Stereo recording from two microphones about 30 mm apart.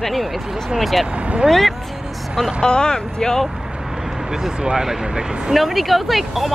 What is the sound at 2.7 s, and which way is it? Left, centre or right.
Speech, left.